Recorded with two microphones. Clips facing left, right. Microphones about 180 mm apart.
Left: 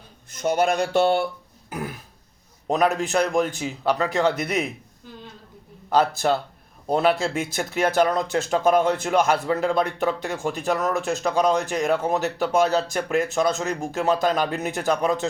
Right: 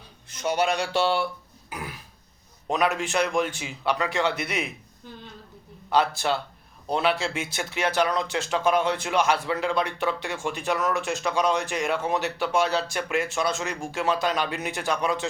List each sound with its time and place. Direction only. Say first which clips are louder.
0.3 s speech: left 4 dB; 50° left (ahead or behind)
1.7 s burping: left 5 dB; 45° left (ahead or behind)
2.6 s speech: left 4 dB; 40° left (ahead or behind)
5.9 s speech: left 3 dB; 45° left (ahead or behind)